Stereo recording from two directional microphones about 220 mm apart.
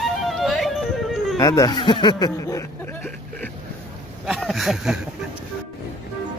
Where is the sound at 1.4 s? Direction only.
15° left (ahead or behind).